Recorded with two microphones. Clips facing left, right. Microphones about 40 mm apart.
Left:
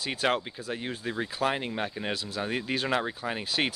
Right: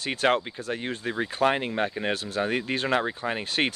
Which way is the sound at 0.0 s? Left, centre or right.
Right.